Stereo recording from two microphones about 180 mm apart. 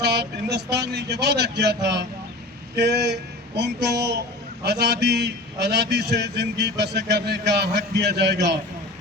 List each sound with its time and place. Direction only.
0.0 s a man's voice: 70° right (ahead or behind)